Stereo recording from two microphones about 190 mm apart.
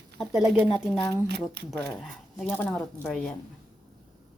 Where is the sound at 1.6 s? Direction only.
5° left (ahead or behind).